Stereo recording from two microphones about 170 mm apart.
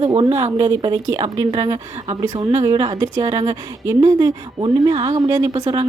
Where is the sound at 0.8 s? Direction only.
25° right (ahead or behind).